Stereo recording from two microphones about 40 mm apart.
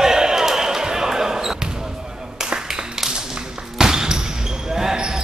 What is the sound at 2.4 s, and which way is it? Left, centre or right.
Clapping, right.